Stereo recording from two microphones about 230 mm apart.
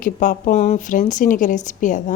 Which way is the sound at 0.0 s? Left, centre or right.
Left.